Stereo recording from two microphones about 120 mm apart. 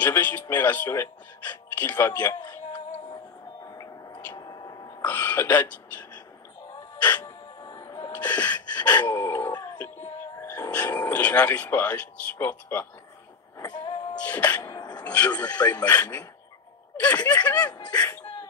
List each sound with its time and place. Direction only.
0.0 s speech: 15° left (ahead or behind)
3.6 s vehicle: 30° left (ahead or behind)
5.0 s speech: 15° left (ahead or behind)
7.0 s music: 10° left (ahead or behind)
7.2 s music: 30° left (ahead or behind)
8.1 s gasp: 10° left (ahead or behind)
8.9 s dog: 30° left (ahead or behind)
9.8 s music: 20° left (ahead or behind)
11.1 s speech: 10° left (ahead or behind)
13.6 s music: 35° left (ahead or behind)
14.2 s speech: 10° left (ahead or behind)
14.6 s music: 35° left (ahead or behind)
15.0 s speech: 10° left (ahead or behind)
17.6 s speech: 35° left (ahead or behind)